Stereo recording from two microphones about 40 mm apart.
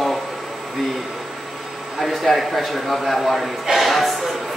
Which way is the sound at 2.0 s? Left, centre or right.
Centre.